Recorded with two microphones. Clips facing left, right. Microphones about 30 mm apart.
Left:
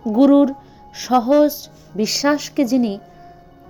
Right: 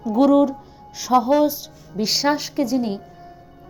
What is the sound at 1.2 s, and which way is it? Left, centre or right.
Music, centre.